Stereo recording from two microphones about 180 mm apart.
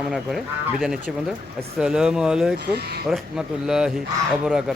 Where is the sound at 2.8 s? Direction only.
60° right (ahead or behind).